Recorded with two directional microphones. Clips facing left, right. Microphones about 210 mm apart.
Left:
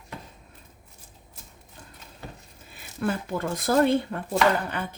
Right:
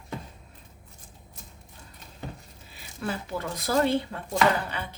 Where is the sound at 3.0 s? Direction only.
50° left (ahead or behind).